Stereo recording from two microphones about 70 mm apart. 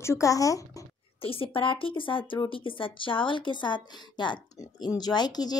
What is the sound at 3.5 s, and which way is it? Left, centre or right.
Speech, left.